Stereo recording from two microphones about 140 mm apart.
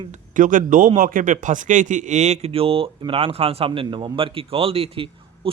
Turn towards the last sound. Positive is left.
turn(degrees=-45)  # may be behind; listen again after turning